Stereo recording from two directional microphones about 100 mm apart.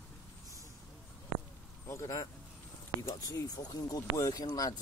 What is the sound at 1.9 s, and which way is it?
Speech, 35° left (ahead or behind).